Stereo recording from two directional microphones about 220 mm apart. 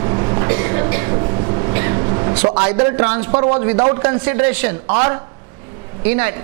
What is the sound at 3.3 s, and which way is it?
A woman's voice, 25° right (ahead or behind).